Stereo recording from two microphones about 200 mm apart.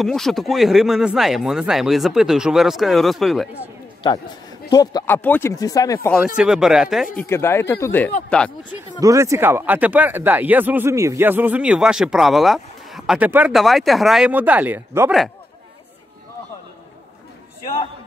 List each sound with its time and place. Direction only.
0.0 s speech: centre (ahead or behind)
4.6 s speech: 20° left (ahead or behind)
6.3 s speech: 5° right (ahead or behind)
7.2 s speech: 10° left (ahead or behind)
9.0 s speech: 15° right (ahead or behind)